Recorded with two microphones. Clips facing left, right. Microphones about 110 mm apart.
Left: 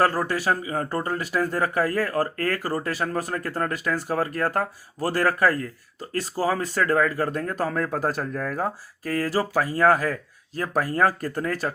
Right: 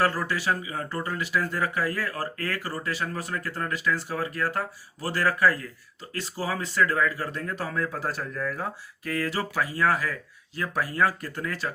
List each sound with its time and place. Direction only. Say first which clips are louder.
0.0 s speech: left 4 dB; 45° left (ahead or behind)